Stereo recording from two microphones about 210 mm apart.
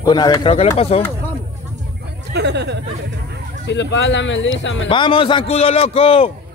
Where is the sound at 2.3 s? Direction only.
55° right (ahead or behind).